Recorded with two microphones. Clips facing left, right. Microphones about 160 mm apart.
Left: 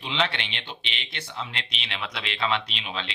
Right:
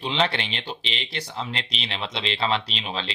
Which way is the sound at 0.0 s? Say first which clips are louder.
Right 4 dB; 35° right (ahead or behind).